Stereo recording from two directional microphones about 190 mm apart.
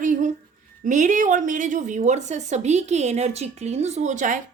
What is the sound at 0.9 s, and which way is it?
A woman's voice, 40° right (ahead or behind).